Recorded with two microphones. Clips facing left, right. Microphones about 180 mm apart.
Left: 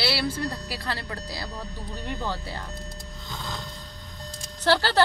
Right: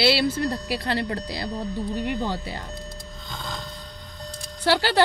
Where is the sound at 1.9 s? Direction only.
15° right (ahead or behind).